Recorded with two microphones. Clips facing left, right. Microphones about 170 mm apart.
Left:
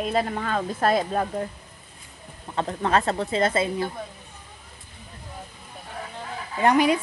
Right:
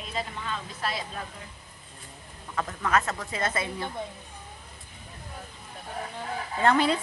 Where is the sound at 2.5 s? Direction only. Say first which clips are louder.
Left 4 dB; 30° left (ahead or behind).